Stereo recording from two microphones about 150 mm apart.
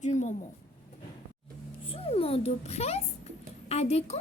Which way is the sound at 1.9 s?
40° left (ahead or behind).